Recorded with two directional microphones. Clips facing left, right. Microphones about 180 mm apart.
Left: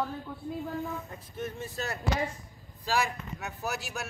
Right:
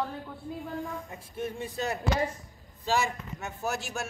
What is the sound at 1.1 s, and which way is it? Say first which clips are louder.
Speech: right 2 dB; 10° right (ahead or behind).